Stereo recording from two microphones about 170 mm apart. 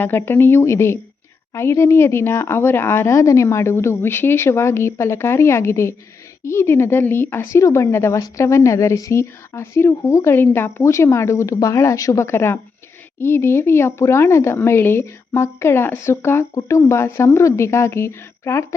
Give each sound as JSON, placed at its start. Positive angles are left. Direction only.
{"t": 0.0, "sound": "speech", "side_deg": 15}